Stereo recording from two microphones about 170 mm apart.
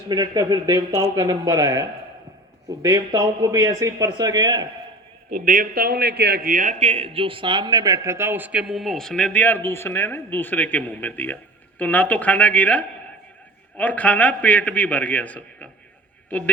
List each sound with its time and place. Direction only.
0.1 s speech: 20° right (ahead or behind)
5.3 s a man's voice: 55° right (ahead or behind); by 15.7 s 5° left (ahead or behind)